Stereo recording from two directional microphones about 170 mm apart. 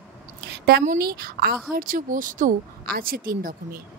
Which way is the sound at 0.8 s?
60° right (ahead or behind).